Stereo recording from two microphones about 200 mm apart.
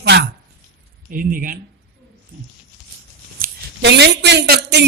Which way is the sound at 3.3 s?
50° right (ahead or behind).